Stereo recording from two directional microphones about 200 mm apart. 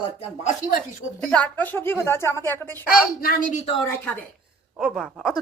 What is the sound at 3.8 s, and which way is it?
Speech, 15° left (ahead or behind).